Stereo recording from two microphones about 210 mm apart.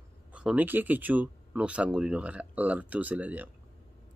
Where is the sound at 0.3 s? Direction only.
5° right (ahead or behind).